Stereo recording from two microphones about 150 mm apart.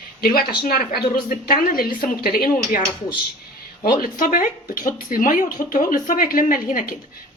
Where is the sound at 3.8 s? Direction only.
70° left (ahead or behind).